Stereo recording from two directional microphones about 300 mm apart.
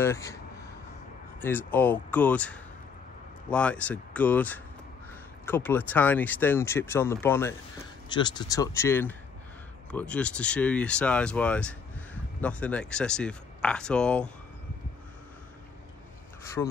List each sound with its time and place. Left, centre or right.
0.0 s speech: centre
1.4 s speech: centre